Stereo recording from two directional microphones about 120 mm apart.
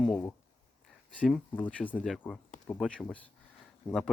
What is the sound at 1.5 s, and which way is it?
Speech, 15° left (ahead or behind).